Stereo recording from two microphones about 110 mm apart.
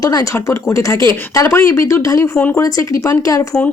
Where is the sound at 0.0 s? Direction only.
35° left (ahead or behind).